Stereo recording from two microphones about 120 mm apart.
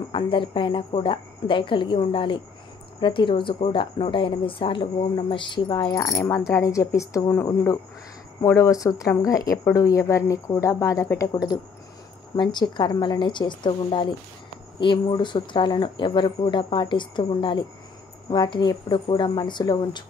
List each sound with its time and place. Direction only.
0.1 s speech: 45° left (ahead or behind)
6.1 s speech: 20° left (ahead or behind)
8.5 s speech: 25° left (ahead or behind)